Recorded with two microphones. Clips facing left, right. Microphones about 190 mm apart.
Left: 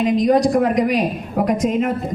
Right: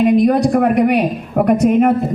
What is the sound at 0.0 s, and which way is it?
A woman's voice, 55° right (ahead or behind).